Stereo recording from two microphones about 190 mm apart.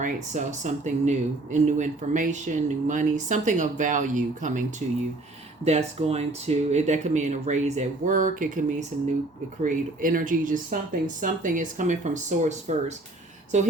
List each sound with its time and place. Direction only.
0.0 s speech: 40° right (ahead or behind)